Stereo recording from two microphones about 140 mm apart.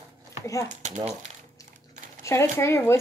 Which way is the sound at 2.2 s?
20° left (ahead or behind).